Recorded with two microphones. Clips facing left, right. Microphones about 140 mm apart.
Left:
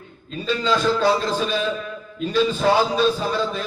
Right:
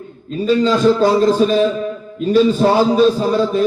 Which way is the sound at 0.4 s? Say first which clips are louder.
Right 8 dB; 40° right (ahead or behind).